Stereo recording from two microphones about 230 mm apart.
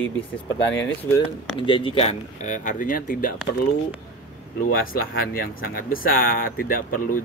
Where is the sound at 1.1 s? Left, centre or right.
Left.